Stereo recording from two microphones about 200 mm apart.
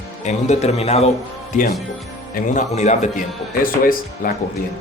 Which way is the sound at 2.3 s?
40° left (ahead or behind).